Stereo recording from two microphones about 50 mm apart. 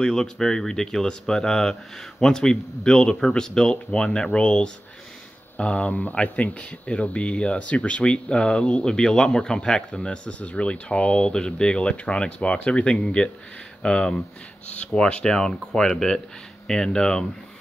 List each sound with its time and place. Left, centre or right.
0.0 s speech: centre